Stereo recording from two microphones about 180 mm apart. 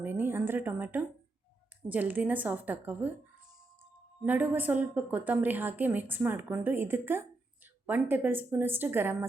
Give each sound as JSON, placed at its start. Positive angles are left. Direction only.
{"t": 0.0, "sound": "a sound", "side_deg": -10}
{"t": 1.9, "sound": "a woman's voice", "side_deg": -10}
{"t": 4.3, "sound": "a woman's voice", "side_deg": -10}